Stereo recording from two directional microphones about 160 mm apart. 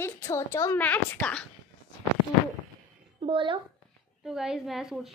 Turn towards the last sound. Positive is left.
turn(degrees=0)  # may be behind; listen again after turning